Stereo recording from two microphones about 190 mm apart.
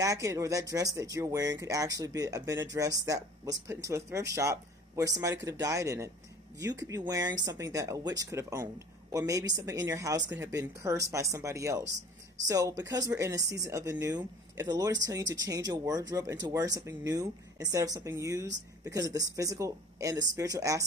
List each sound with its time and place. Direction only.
0.0 s speech: 15° right (ahead or behind)